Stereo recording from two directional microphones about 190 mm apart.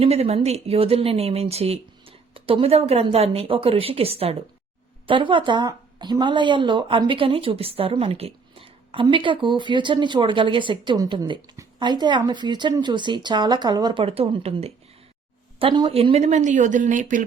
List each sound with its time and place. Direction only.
0.0 s speech: 30° right (ahead or behind)